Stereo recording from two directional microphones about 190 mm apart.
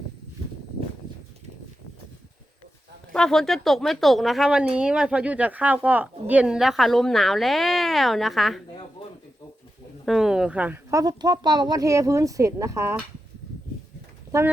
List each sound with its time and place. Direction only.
3.1 s speech: 5° left (ahead or behind)
10.1 s speech: centre (ahead or behind)
11.0 s speech: 20° right (ahead or behind)